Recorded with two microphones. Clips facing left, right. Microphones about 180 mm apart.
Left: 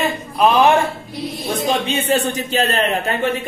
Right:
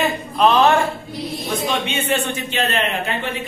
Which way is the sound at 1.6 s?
35° left (ahead or behind).